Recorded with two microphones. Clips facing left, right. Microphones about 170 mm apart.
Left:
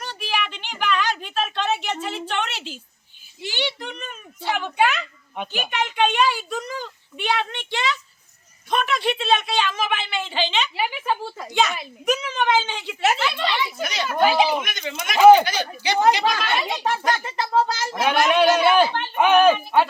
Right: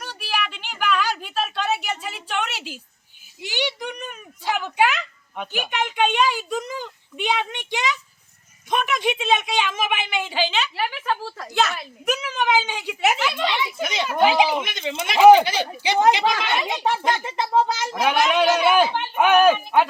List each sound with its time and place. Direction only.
0.0 s a sound: 10° right (ahead or behind)
3.4 s a woman's voice: 15° right (ahead or behind)
10.8 s a woman's voice: 10° left (ahead or behind); by 14.6 s 15° right (ahead or behind)
14.6 s speech: 25° right (ahead or behind)
15.2 s speech: centre (ahead or behind)
15.4 s a woman's voice: 25° right (ahead or behind)